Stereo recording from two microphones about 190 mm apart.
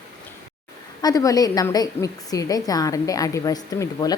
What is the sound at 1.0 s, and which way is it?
A woman's voice, 20° left (ahead or behind).